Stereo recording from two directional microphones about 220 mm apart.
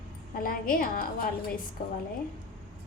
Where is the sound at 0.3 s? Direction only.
40° left (ahead or behind).